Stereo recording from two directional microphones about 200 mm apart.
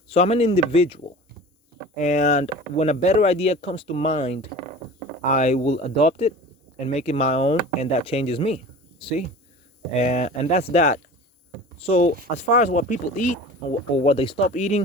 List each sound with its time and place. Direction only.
0.1 s speech: 30° left (ahead or behind)